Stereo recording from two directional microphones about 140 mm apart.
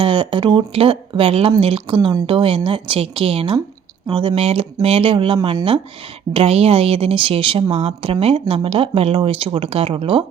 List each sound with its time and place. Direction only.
0.0 s speech: 35° right (ahead or behind)